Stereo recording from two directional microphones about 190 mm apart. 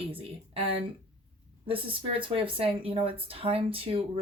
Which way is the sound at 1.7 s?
30° right (ahead or behind).